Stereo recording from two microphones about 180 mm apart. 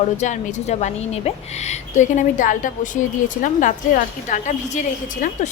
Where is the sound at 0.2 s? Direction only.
40° left (ahead or behind).